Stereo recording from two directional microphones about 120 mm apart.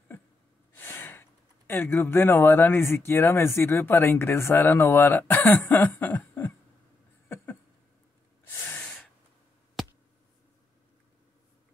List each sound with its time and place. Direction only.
0.7 s speech: 20° left (ahead or behind)
8.6 s gasp: 10° left (ahead or behind)
9.8 s a sound: centre (ahead or behind)